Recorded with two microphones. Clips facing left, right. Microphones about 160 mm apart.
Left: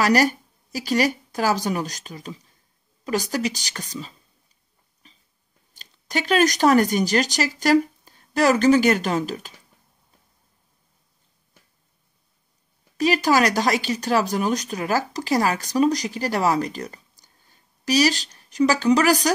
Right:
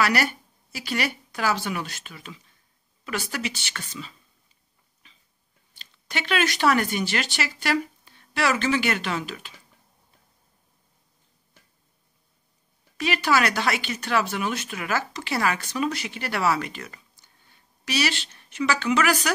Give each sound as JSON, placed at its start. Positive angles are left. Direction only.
{"t": 0.0, "sound": "speech", "side_deg": 40}
{"t": 5.0, "sound": "a sound", "side_deg": 40}
{"t": 5.8, "sound": "speech", "side_deg": 40}
{"t": 12.9, "sound": "speech", "side_deg": 40}